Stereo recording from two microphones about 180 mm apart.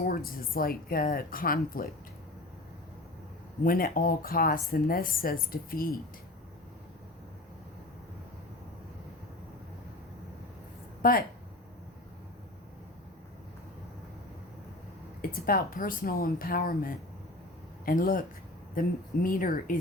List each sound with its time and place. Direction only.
0.0 s speech: 55° left (ahead or behind)
3.6 s speech: 55° left (ahead or behind)
11.0 s speech: 50° left (ahead or behind)
15.2 s speech: 55° left (ahead or behind)